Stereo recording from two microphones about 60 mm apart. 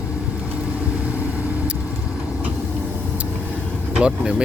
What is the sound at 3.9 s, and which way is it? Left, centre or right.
Speech, centre.